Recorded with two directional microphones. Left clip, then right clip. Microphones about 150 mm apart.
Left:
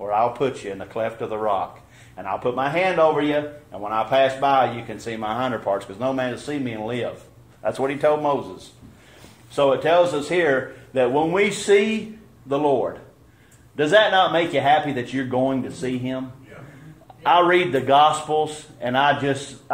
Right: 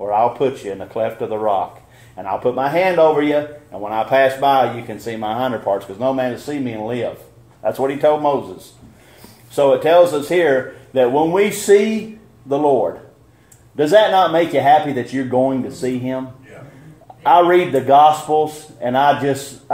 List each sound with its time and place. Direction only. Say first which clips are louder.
0.0 s speech: right 5 dB; 20° right (ahead or behind)
9.6 s speech: right 6 dB; 30° right (ahead or behind)
13.7 s speech: right 4 dB; 40° right (ahead or behind)
14.3 s speech: right 5 dB; 25° right (ahead or behind)
17.2 s speech: right 5 dB; 30° right (ahead or behind)